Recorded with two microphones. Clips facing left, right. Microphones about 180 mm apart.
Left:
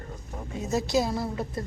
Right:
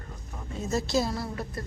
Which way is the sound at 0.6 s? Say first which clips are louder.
Left 2 dB; 15° left (ahead or behind).